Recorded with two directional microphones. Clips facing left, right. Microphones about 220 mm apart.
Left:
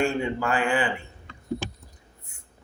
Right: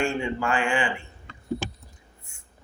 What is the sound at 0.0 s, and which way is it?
Speech, 40° left (ahead or behind).